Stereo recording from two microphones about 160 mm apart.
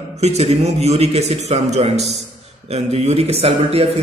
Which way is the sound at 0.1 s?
40° right (ahead or behind).